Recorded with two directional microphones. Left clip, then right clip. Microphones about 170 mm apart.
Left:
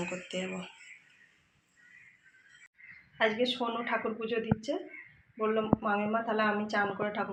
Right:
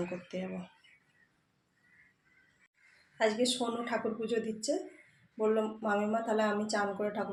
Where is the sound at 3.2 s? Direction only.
15° right (ahead or behind).